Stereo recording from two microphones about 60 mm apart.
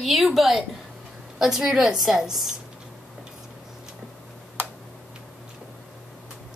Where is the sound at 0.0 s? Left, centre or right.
Centre.